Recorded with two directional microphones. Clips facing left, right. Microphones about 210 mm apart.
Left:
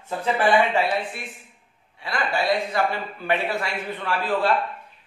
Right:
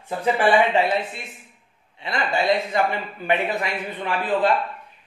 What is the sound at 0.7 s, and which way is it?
A man's voice, 20° right (ahead or behind).